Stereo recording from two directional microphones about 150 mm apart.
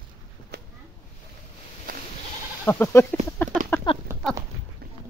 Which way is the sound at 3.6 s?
60° right (ahead or behind).